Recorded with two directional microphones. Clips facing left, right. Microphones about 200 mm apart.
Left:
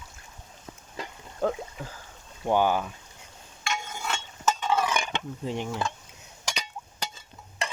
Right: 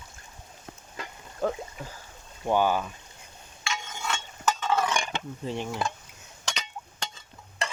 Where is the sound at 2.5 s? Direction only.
15° left (ahead or behind).